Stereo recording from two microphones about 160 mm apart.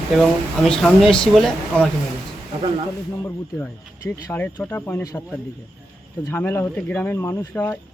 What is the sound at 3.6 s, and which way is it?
A man's voice, 10° left (ahead or behind).